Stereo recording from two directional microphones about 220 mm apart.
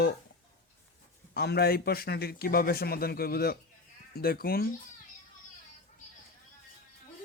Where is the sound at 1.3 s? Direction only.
45° left (ahead or behind).